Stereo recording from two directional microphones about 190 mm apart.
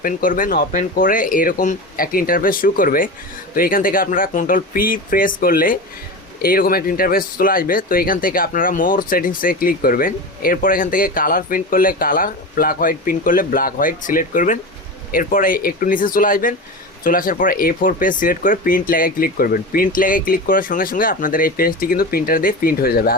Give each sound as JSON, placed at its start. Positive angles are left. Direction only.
{"t": 0.0, "sound": "speech", "side_deg": 45}